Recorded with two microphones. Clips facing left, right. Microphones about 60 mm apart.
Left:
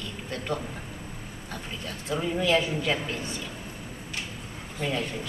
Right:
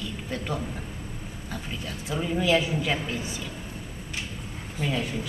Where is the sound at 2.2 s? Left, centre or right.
Centre.